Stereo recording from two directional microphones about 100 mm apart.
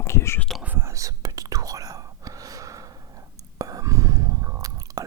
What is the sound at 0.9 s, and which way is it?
Whispering, 35° right (ahead or behind).